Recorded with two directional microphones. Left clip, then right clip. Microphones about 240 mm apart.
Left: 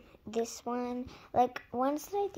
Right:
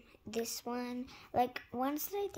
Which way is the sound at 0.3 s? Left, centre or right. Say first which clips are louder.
Left 4 dB; centre.